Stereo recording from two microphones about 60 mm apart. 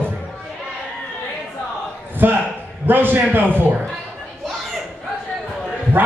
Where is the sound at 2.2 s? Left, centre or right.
Right.